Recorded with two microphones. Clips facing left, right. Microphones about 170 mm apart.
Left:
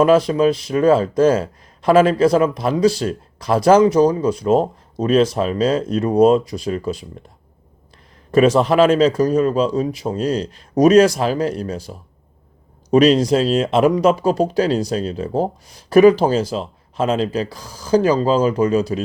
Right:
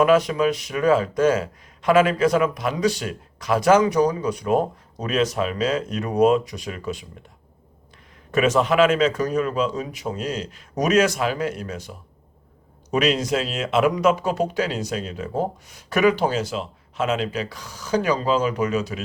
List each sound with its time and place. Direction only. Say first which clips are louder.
0.0 s speech: left 4 dB; 30° left (ahead or behind)
8.3 s speech: left 5 dB; 30° left (ahead or behind)